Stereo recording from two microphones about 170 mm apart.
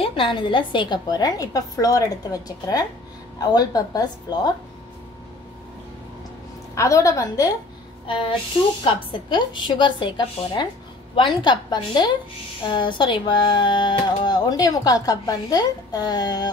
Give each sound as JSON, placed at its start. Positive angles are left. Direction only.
{"t": 0.0, "sound": "speech", "side_deg": 30}
{"t": 6.7, "sound": "speech", "side_deg": 20}
{"t": 8.1, "sound": "speech", "side_deg": 30}